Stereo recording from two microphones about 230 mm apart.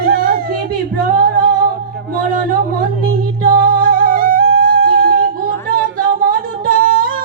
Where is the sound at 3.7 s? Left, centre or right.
Right.